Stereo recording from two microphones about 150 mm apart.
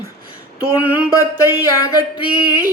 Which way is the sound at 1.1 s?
25° left (ahead or behind).